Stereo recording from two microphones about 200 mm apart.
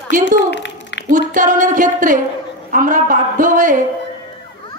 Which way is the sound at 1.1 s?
40° right (ahead or behind).